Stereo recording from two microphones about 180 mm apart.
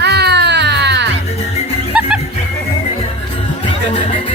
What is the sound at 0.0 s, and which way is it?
Baby cry, 70° right (ahead or behind).